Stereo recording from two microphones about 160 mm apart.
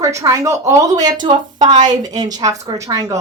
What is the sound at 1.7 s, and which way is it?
Speech, 45° right (ahead or behind).